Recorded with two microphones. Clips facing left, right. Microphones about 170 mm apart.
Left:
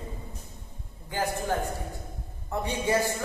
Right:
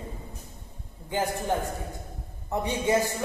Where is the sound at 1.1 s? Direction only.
20° right (ahead or behind).